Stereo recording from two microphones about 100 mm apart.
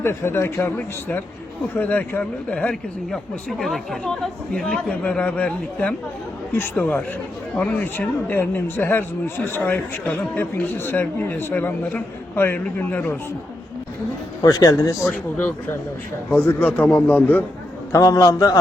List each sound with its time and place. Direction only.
0.0 s speech: 25° left (ahead or behind)
14.4 s a man's voice: 35° left (ahead or behind)
15.4 s speech: 20° left (ahead or behind)
17.9 s a man's voice: 35° left (ahead or behind)